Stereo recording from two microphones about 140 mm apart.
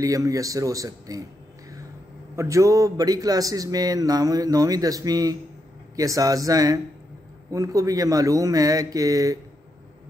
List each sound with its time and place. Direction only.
0.0 s a man's voice: 25° right (ahead or behind)
2.3 s a man's voice: 20° right (ahead or behind)